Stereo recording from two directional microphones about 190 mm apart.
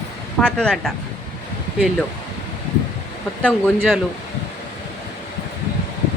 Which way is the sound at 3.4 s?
5° left (ahead or behind).